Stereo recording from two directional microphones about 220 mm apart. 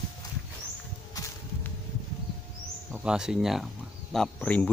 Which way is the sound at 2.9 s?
5° right (ahead or behind).